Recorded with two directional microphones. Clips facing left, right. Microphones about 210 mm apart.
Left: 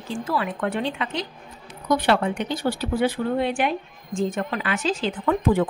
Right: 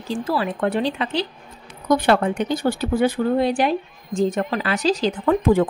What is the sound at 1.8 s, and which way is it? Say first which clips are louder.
Speech: right 3 dB; 45° right (ahead or behind).